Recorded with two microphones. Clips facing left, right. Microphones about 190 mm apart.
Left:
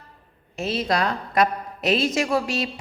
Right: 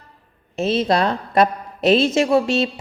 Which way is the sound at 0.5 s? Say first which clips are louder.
Right 6 dB; 25° right (ahead or behind).